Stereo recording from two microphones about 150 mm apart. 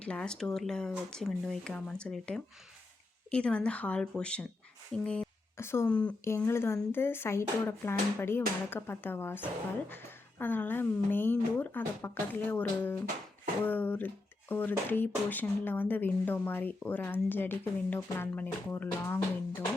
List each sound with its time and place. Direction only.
0.0 s speech: 5° left (ahead or behind)